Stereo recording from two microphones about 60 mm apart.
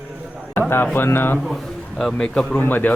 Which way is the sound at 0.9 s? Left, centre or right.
Left.